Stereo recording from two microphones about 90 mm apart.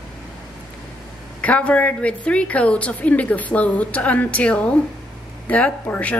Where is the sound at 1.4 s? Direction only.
15° left (ahead or behind).